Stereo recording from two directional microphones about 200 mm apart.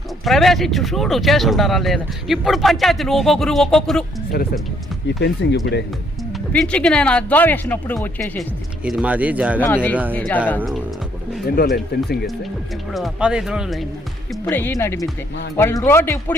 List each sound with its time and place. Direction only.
0.3 s speech: centre (ahead or behind)
4.3 s speech: 50° left (ahead or behind)
6.5 s speech: 5° left (ahead or behind)
9.6 s speech: 10° left (ahead or behind)
10.6 s speech: centre (ahead or behind)
11.4 s speech: 50° left (ahead or behind)
12.9 s speech: centre (ahead or behind)
14.4 s speech: 10° left (ahead or behind)